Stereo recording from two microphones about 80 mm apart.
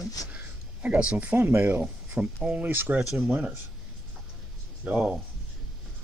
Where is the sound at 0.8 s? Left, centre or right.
Centre.